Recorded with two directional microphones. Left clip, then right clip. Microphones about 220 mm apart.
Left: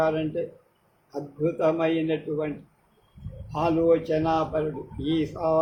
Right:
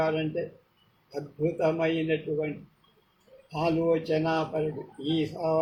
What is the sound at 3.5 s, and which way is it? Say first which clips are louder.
Speech: left 4 dB; 15° left (ahead or behind).